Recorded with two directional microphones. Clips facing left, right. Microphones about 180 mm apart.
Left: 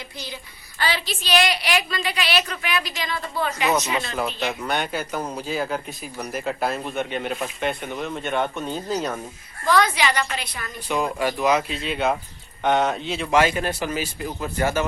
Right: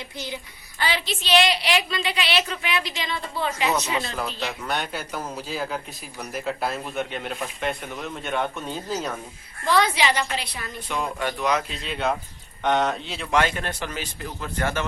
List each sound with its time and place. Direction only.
0.8 s a woman's voice: 20° right (ahead or behind)
4.2 s speech: centre (ahead or behind)
9.6 s a woman's voice: 25° right (ahead or behind)
10.8 s speech: 5° left (ahead or behind)